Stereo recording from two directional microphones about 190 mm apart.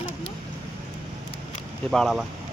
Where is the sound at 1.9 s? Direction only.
Centre (ahead or behind).